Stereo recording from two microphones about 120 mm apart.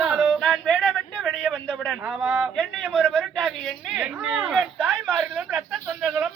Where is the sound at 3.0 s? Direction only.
15° right (ahead or behind).